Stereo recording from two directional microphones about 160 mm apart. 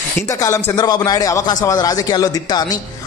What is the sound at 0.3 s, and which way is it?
A man's voice, 15° left (ahead or behind).